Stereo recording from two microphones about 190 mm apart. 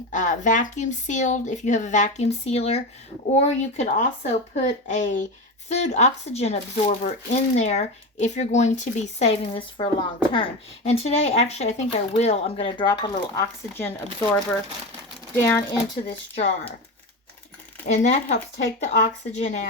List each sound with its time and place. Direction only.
0.1 s speech: 40° left (ahead or behind); by 15.6 s 15° left (ahead or behind)
16.0 s speech: 35° left (ahead or behind)
17.8 s speech: 35° left (ahead or behind)